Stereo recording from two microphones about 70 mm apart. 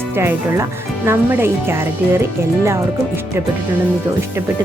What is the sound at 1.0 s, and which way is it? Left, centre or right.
Speech, right.